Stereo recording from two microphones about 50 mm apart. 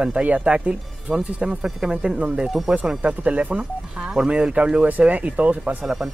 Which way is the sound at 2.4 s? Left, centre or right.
Centre.